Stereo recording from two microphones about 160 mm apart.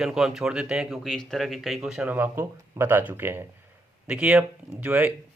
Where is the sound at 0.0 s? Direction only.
5° right (ahead or behind).